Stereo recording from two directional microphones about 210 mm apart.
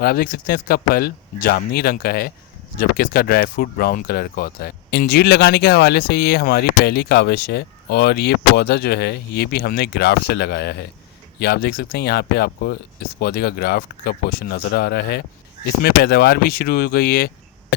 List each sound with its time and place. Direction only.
0.0 s speech: 45° left (ahead or behind)